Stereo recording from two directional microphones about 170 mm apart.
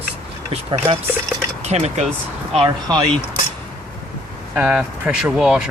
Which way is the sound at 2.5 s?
25° right (ahead or behind).